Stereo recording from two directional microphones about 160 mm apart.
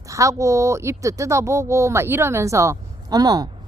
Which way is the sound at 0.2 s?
20° right (ahead or behind).